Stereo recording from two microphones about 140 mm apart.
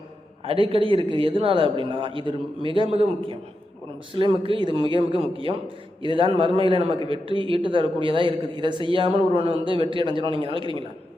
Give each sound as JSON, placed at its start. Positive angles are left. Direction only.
{"t": 0.4, "sound": "a man's voice", "side_deg": -40}